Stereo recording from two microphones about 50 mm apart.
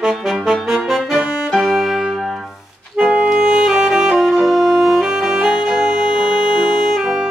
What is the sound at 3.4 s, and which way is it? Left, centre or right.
Saxophone, centre.